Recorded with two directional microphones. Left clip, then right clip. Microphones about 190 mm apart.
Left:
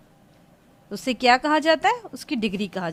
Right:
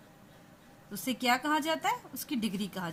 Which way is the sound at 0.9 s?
45° left (ahead or behind).